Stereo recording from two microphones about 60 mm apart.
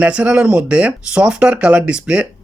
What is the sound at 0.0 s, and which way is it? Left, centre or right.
Speech, right.